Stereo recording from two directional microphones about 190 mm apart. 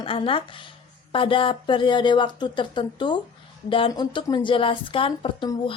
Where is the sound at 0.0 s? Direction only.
30° left (ahead or behind).